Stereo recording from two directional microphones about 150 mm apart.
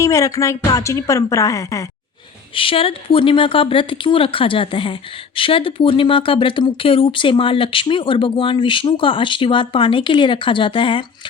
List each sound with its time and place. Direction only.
0.0 s a woman's voice: 20° left (ahead or behind)
2.6 s speech: 35° left (ahead or behind)